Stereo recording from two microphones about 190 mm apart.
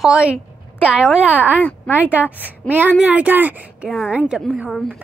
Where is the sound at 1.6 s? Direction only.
10° left (ahead or behind).